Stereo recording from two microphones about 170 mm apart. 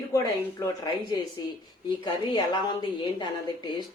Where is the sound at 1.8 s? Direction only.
25° left (ahead or behind).